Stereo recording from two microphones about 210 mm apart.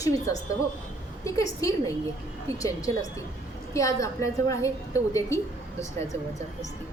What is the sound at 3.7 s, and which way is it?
A woman's voice, 15° left (ahead or behind).